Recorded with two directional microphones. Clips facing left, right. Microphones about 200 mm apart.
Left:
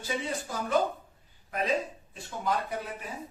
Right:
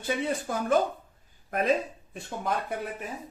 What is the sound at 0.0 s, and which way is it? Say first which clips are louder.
Speech: right 4 dB; 55° right (ahead or behind).